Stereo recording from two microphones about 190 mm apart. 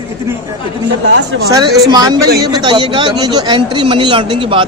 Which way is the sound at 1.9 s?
20° right (ahead or behind).